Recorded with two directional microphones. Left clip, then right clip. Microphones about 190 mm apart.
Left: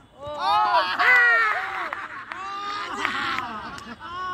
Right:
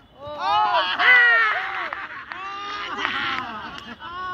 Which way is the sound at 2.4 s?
35° left (ahead or behind).